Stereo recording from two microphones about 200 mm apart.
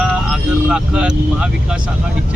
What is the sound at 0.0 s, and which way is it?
Vehicle, 5° right (ahead or behind).